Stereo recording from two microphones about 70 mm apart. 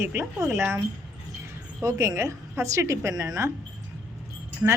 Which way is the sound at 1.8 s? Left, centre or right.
Right.